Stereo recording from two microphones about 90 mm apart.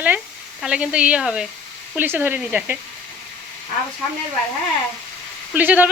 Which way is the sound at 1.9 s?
25° right (ahead or behind).